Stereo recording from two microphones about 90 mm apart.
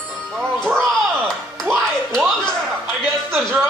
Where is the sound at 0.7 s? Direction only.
5° left (ahead or behind).